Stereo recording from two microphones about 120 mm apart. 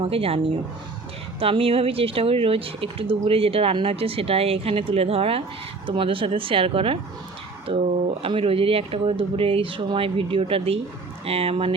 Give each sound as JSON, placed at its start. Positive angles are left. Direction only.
{"t": 0.0, "sound": "speech", "side_deg": -55}
{"t": 1.4, "sound": "speech", "side_deg": -50}